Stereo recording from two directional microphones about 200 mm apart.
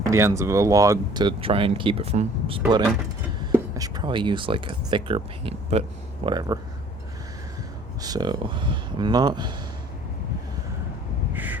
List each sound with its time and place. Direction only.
0.0 s speech: 15° right (ahead or behind)
8.0 s speech: 20° right (ahead or behind)
11.3 s crow: 10° right (ahead or behind)